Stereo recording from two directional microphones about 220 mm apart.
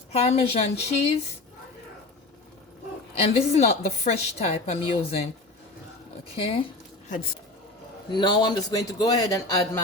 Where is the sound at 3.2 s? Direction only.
30° left (ahead or behind).